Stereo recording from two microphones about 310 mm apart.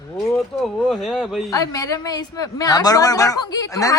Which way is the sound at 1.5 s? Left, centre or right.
Centre.